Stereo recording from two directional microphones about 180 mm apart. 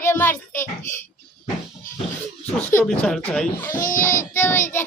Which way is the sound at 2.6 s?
5° left (ahead or behind).